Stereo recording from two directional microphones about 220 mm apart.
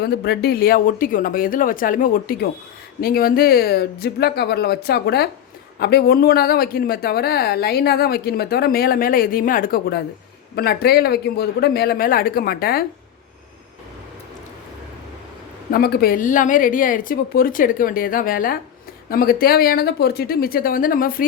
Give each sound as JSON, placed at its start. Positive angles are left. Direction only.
{"t": 0.0, "sound": "a woman's voice", "side_deg": 45}
{"t": 15.7, "sound": "a woman's voice", "side_deg": 45}